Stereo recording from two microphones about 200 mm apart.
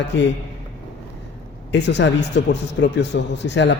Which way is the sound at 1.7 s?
60° left (ahead or behind).